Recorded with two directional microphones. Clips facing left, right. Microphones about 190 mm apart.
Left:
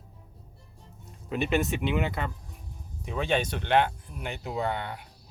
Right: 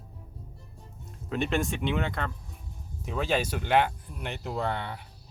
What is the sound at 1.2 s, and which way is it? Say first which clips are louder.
Speech: left 1 dB; 5° left (ahead or behind).